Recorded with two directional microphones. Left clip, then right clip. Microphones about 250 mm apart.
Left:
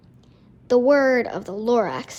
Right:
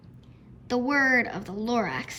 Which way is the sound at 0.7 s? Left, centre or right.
Centre.